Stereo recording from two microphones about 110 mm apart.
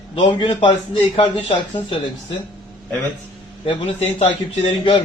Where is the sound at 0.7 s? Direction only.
60° left (ahead or behind).